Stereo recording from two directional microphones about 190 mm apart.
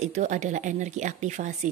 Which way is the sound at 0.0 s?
35° right (ahead or behind).